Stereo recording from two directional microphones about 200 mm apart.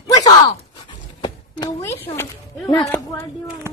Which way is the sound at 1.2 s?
20° left (ahead or behind).